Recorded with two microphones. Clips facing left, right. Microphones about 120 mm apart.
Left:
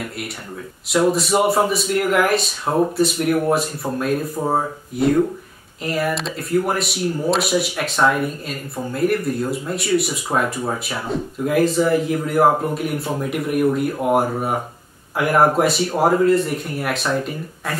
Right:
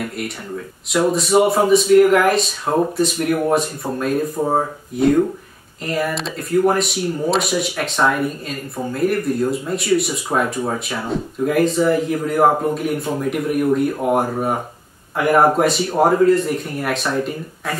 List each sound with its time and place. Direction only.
0.8 s speech: centre (ahead or behind)